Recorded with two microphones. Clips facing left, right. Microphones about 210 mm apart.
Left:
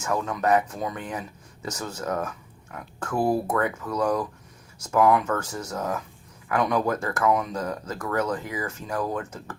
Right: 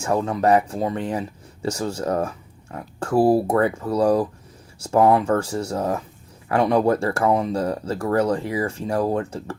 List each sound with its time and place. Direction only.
0.0 s speech: 30° right (ahead or behind)